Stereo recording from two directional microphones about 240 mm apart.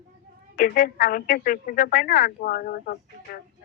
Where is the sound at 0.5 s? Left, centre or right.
Left.